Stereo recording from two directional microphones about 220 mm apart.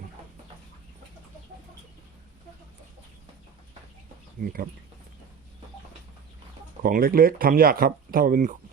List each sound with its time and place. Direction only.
4.4 s speech: 40° right (ahead or behind)
6.8 s speech: 40° right (ahead or behind)